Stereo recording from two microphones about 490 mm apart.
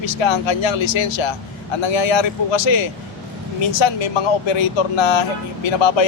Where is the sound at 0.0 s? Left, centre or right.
Left.